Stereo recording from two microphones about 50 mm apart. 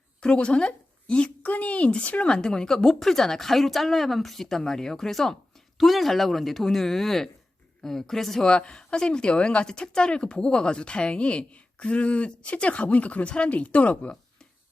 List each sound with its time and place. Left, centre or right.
0.2 s a woman's voice: centre